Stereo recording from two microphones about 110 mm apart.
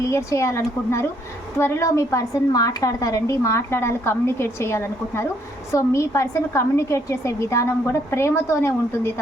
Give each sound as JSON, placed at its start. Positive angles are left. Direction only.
{"t": 0.0, "sound": "a woman's voice", "side_deg": 25}